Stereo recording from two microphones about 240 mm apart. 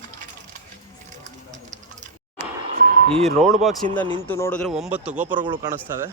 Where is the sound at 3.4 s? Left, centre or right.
Centre.